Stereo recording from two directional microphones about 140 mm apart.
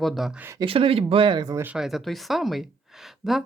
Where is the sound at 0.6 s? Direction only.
40° right (ahead or behind).